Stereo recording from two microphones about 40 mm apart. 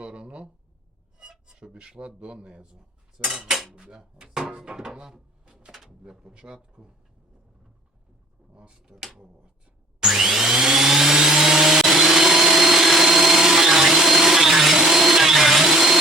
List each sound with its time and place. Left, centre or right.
0.0 s a sound: right
1.2 s speech: centre
3.2 s speech: centre
3.8 s speech: right
5.0 s drawer open or close: centre
6.0 s speech: centre
8.5 s speech: right
10.0 s vacuum cleaner: centre